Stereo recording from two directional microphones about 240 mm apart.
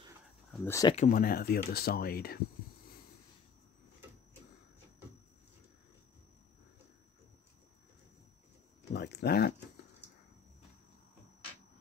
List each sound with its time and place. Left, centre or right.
0.5 s speech: centre
0.9 s speech: left
8.9 s a sound: left